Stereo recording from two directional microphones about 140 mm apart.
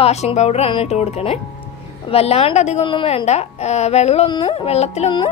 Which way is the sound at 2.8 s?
40° left (ahead or behind).